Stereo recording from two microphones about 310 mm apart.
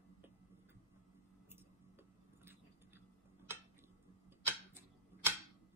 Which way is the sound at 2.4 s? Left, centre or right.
Centre.